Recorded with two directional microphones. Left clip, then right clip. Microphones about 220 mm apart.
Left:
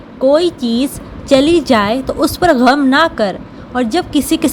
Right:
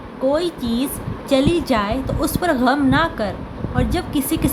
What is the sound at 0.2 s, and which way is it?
A woman's voice, 30° left (ahead or behind).